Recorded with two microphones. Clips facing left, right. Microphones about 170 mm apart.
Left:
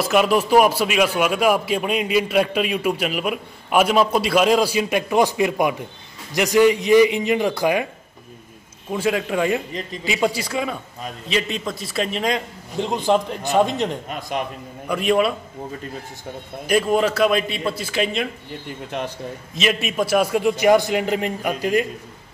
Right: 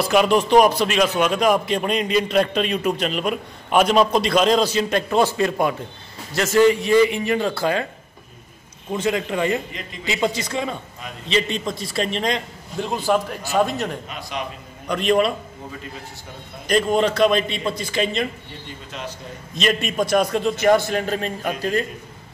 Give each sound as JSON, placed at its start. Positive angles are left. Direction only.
{"t": 0.0, "sound": "a man's voice", "side_deg": 5}
{"t": 8.9, "sound": "a man's voice", "side_deg": 10}
{"t": 12.7, "sound": "a man's voice", "side_deg": 20}
{"t": 14.0, "sound": "a man's voice", "side_deg": 45}
{"t": 14.9, "sound": "a man's voice", "side_deg": 5}
{"t": 16.6, "sound": "a man's voice", "side_deg": 5}
{"t": 18.7, "sound": "speech", "side_deg": 60}
{"t": 19.5, "sound": "a man's voice", "side_deg": 5}